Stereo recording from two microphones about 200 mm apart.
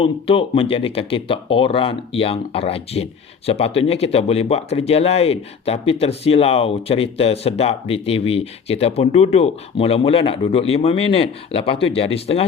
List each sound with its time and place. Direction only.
0.0 s speech: 25° left (ahead or behind)